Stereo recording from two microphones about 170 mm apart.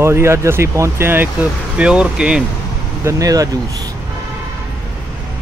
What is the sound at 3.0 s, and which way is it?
Speech, 20° right (ahead or behind).